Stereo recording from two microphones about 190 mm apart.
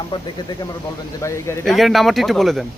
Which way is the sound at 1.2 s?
15° left (ahead or behind).